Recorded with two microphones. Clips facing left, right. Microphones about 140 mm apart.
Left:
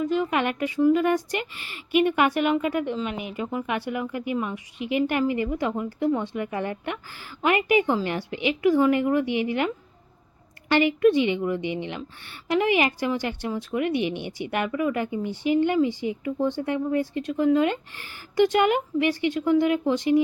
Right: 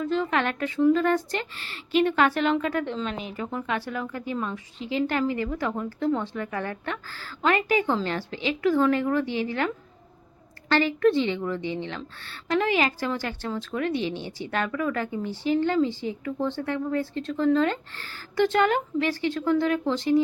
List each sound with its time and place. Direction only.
0.0 s a woman's voice: 10° left (ahead or behind)